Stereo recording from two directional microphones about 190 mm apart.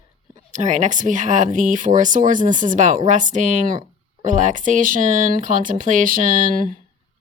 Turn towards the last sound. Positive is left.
turn(degrees=-45)  # may be behind; listen again after turning